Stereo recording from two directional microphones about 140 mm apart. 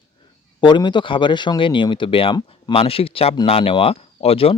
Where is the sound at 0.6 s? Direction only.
35° left (ahead or behind).